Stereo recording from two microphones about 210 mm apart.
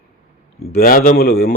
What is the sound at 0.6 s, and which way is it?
Speech, 45° left (ahead or behind).